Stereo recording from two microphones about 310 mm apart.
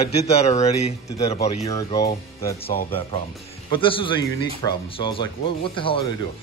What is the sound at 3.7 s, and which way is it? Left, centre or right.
Speech, centre.